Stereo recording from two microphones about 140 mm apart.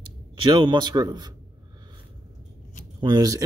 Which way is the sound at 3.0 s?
25° right (ahead or behind).